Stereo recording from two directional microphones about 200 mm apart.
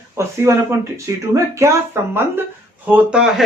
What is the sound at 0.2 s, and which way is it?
Speech, 10° right (ahead or behind).